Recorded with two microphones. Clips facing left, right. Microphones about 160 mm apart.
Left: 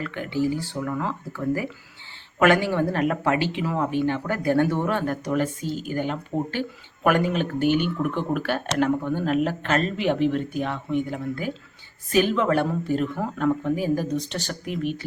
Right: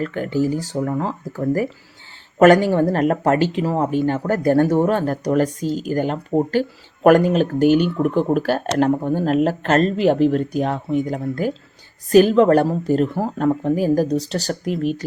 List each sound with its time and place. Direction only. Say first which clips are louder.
0.0 s speech: right 5 dB; 45° right (ahead or behind)